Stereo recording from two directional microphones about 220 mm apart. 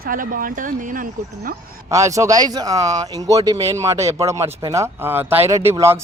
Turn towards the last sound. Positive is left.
turn(degrees=-10)  # may be behind; listen again after turning